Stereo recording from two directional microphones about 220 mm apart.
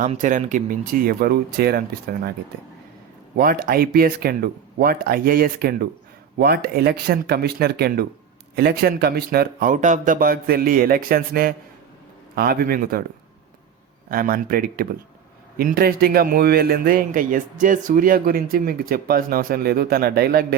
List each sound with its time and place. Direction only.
0.0 s speech: 35° right (ahead or behind)
3.3 s speech: 40° right (ahead or behind)
14.1 s speech: 40° right (ahead or behind)